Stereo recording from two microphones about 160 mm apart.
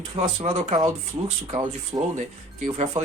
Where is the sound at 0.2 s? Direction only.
45° right (ahead or behind).